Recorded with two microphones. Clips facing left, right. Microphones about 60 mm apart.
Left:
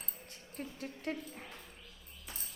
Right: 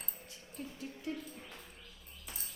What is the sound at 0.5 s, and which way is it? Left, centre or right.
Speech, left.